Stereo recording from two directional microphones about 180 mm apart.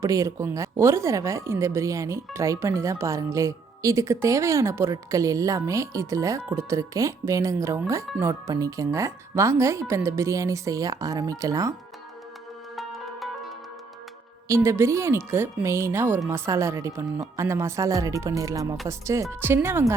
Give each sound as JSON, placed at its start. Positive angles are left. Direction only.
{"t": 0.0, "sound": "speech", "side_deg": -15}
{"t": 12.7, "sound": "music", "side_deg": 0}
{"t": 14.4, "sound": "speech", "side_deg": -15}